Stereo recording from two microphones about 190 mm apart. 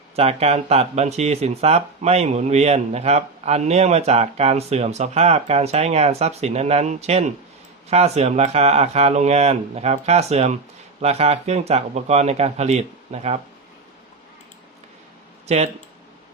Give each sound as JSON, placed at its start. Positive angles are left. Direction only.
{"t": 0.2, "sound": "speech", "side_deg": -35}
{"t": 15.4, "sound": "speech", "side_deg": -35}